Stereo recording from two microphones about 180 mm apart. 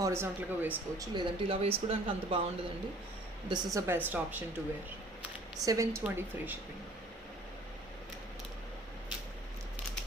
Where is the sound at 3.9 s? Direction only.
10° right (ahead or behind).